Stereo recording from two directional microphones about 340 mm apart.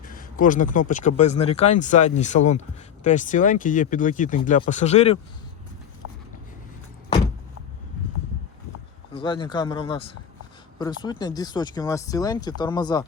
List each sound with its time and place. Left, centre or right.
0.0 s speech: left
9.1 s speech: centre